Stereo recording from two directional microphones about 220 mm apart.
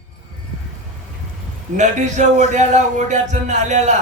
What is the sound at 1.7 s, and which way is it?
A man's voice, 30° right (ahead or behind).